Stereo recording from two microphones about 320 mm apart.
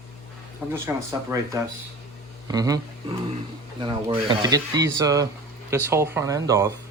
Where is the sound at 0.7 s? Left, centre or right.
Centre.